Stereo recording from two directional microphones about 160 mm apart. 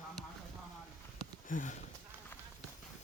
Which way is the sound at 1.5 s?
50° left (ahead or behind).